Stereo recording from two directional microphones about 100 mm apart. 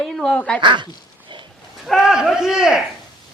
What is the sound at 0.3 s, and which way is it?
Speech, 10° left (ahead or behind).